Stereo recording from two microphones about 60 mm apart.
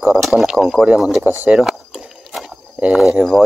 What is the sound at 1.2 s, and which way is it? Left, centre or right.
Speech, right.